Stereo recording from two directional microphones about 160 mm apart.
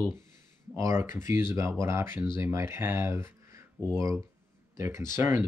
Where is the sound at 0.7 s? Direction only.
20° right (ahead or behind).